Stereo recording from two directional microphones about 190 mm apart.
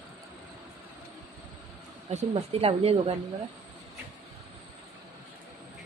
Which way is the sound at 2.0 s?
35° right (ahead or behind).